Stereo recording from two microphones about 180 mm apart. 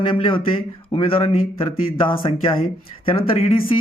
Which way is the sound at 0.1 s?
30° left (ahead or behind).